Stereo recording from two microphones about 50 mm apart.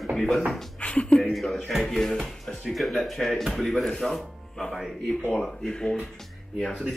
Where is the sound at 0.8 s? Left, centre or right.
Left.